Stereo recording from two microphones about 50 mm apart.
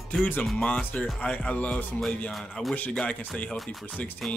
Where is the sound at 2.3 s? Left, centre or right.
Centre.